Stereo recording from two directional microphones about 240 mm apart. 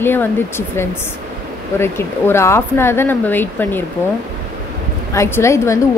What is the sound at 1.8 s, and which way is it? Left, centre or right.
A woman's voice, centre.